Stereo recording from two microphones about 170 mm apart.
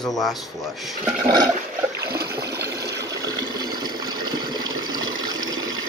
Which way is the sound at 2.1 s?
65° right (ahead or behind).